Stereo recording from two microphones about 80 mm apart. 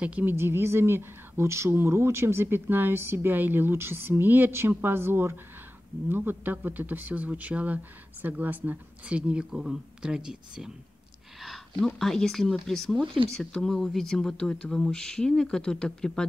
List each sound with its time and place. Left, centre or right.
0.0 s speech: right
11.4 s speech: centre